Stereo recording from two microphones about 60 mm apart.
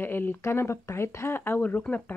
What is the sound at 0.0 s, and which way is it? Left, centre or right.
Speech, left.